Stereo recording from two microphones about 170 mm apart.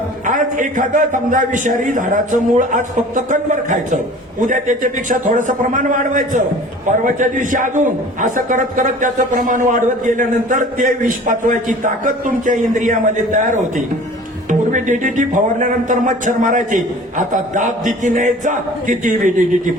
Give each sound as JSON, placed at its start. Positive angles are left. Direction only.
{"t": 0.3, "sound": "a man's voice", "side_deg": -50}